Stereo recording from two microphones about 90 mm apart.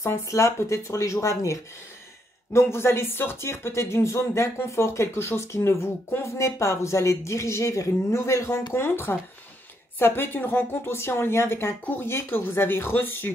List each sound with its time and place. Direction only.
0.0 s a woman's voice: 30° left (ahead or behind)